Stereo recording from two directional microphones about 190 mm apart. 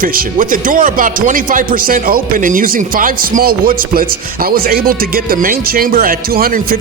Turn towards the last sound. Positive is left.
turn(degrees=-50)  # may be behind; listen again after turning